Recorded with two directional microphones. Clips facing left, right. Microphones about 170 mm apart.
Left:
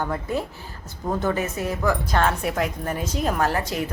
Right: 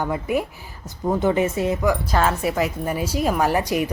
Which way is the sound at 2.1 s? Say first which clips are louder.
Right 2 dB; 5° right (ahead or behind).